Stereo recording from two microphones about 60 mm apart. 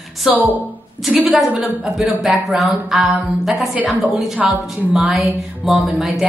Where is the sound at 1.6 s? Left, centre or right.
Centre.